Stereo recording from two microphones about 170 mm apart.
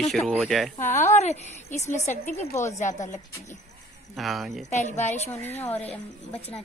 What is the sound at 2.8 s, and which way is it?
Speech, 45° left (ahead or behind).